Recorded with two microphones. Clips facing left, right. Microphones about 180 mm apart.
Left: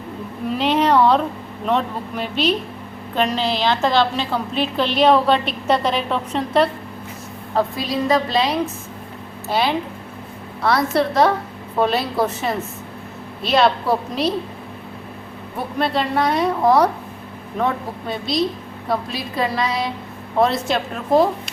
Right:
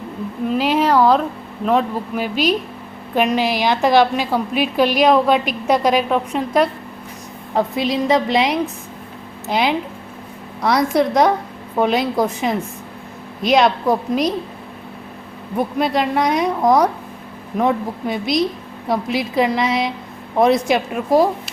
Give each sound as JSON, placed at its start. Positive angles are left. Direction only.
{"t": 0.4, "sound": "a sound", "side_deg": -10}
{"t": 1.6, "sound": "a woman's voice", "side_deg": -5}
{"t": 7.5, "sound": "a woman's voice", "side_deg": -20}
{"t": 15.8, "sound": "a woman's voice", "side_deg": -15}